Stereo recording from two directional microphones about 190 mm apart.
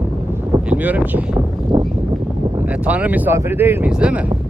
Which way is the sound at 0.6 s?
5° right (ahead or behind).